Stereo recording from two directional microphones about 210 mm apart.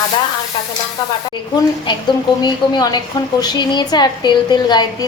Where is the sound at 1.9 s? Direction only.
20° left (ahead or behind).